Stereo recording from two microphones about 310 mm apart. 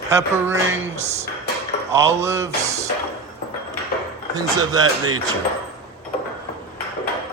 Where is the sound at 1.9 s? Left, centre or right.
Centre.